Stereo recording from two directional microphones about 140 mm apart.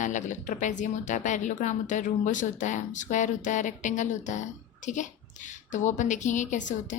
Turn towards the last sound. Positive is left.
turn(degrees=60)  # may be behind; listen again after turning